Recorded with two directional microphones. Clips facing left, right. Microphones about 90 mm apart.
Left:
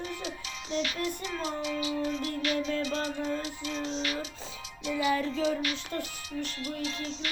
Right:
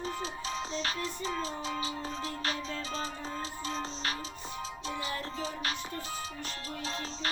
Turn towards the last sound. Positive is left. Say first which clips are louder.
# left 2 dB
turn(degrees=-35)  # may be behind; listen again after turning